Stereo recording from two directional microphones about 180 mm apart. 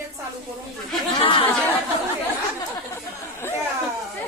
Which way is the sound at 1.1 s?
30° left (ahead or behind).